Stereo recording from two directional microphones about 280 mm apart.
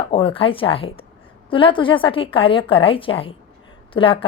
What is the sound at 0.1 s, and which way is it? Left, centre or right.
A woman's voice, centre.